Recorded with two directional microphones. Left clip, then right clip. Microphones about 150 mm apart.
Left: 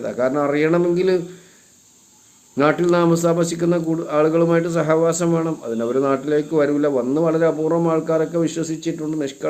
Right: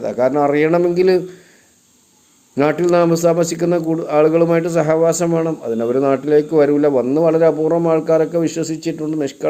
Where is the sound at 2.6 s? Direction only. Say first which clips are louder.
Right 3 dB; 25° right (ahead or behind).